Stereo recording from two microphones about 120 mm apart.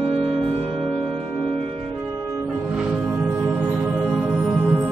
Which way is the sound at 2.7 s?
10° right (ahead or behind).